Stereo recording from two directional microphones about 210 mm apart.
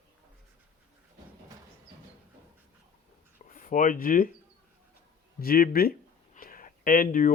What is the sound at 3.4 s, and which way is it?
Speech, 40° left (ahead or behind).